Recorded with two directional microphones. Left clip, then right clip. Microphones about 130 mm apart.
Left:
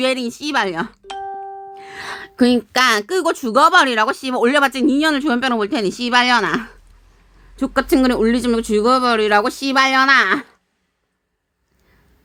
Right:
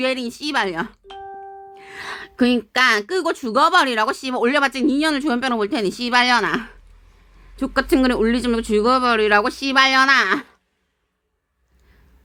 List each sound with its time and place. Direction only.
0.0 s a woman's voice: 40° left (ahead or behind)